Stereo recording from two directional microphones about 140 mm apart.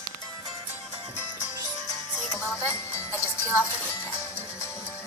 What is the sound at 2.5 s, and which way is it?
Music, 20° left (ahead or behind).